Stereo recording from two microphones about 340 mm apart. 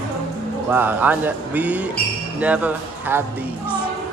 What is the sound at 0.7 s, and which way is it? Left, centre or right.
Speech, centre.